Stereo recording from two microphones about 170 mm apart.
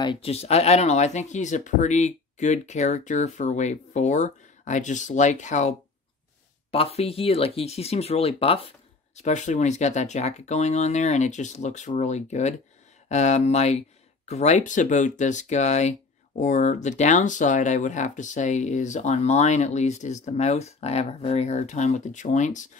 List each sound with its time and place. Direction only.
0.0 s speech: 30° left (ahead or behind); by 22.7 s 45° left (ahead or behind)